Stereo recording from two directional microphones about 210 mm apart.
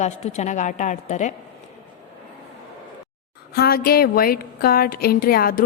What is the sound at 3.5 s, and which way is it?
A woman's voice, 50° left (ahead or behind).